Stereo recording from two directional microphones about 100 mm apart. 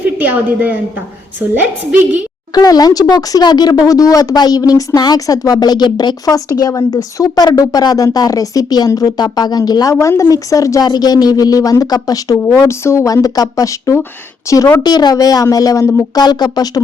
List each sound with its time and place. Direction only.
0.0 s a woman's voice: 15° right (ahead or behind)
2.6 s a woman's voice: 40° left (ahead or behind)
12.5 s a woman's voice: 25° left (ahead or behind)
16.1 s speech: 45° left (ahead or behind)